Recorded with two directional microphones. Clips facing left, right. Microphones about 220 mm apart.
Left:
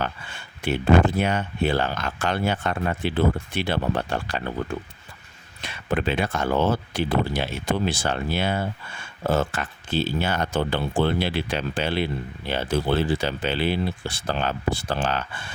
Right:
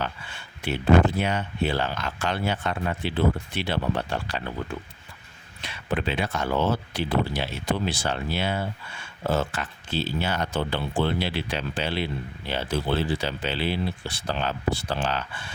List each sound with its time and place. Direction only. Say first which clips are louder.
0.6 s speech: left 1 dB; 50° left (ahead or behind)
5.6 s speech: left 3 dB; 50° left (ahead or behind)